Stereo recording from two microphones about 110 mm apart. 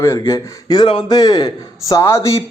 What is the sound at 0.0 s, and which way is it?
A man's voice, 25° left (ahead or behind).